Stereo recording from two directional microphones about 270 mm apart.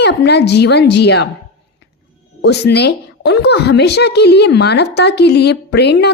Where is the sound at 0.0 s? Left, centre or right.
Left.